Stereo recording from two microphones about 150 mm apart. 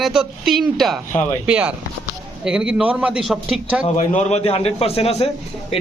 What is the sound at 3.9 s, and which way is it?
A man's voice, 55° left (ahead or behind).